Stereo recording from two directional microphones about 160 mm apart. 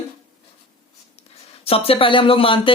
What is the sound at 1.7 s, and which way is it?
Speech, 35° left (ahead or behind).